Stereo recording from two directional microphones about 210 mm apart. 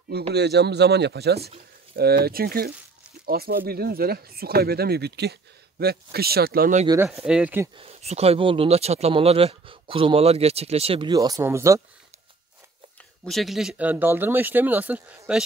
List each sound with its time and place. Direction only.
0.3 s speech: 50° right (ahead or behind)
7.2 s speech: 5° right (ahead or behind)
7.7 s speech: 30° right (ahead or behind); by 11.8 s 15° right (ahead or behind)
13.2 s speech: centre (ahead or behind)